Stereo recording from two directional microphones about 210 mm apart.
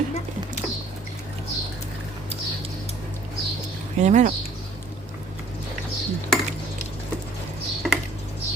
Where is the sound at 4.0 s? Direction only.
35° right (ahead or behind).